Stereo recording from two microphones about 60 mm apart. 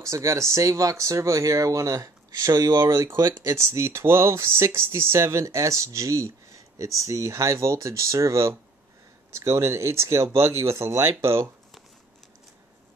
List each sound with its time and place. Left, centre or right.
0.0 s speech: right
2.9 s speech: right
3.2 s speech: right
3.5 s speech: right